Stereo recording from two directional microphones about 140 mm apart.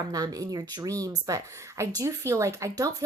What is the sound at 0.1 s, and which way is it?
Speech, 25° right (ahead or behind).